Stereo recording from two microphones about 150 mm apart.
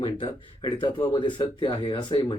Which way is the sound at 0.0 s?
35° left (ahead or behind).